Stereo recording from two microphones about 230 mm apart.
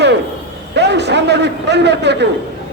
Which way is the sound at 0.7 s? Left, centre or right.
Right.